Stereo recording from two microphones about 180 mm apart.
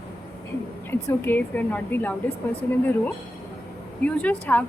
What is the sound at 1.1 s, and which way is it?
Speech, 10° left (ahead or behind).